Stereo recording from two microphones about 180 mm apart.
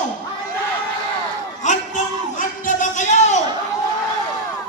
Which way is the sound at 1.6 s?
45° left (ahead or behind).